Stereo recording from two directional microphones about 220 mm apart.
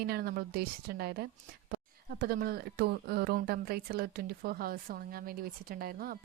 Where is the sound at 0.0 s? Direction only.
45° right (ahead or behind).